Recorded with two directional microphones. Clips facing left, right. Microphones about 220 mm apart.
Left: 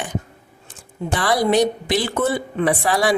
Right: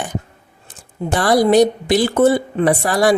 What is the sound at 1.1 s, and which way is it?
A woman's voice, 40° right (ahead or behind).